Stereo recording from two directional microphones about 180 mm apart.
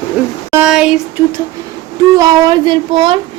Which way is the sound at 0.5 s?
5° right (ahead or behind).